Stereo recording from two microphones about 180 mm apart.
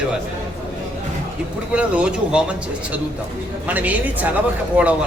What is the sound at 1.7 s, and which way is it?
Speech, 5° right (ahead or behind).